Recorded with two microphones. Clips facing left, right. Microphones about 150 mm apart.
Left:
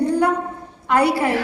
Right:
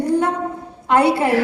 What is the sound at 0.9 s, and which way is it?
Speech, 25° right (ahead or behind).